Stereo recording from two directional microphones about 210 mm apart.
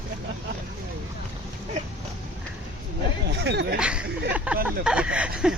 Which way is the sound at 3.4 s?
50° right (ahead or behind).